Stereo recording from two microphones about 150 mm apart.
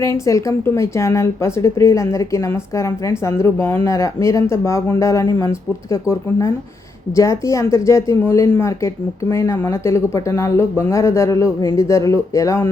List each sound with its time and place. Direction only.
0.0 s speech: 20° left (ahead or behind)